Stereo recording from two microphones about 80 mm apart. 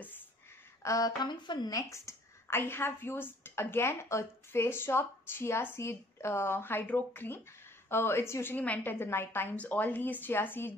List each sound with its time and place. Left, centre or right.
0.8 s speech: left
1.2 s a woman's voice: left